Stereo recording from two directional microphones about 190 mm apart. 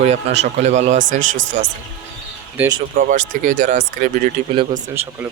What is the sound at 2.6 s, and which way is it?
Speech, 10° right (ahead or behind).